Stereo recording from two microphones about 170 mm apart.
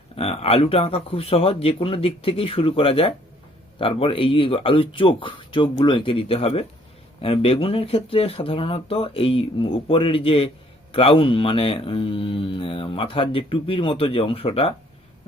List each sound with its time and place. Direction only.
0.2 s speech: 35° left (ahead or behind)